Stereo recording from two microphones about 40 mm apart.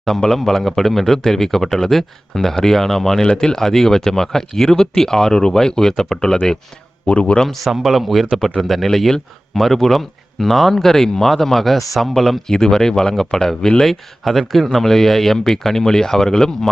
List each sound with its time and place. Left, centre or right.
0.0 s speech: centre
7.1 s a man's voice: left
7.7 s a man's voice: centre
13.8 s speech: centre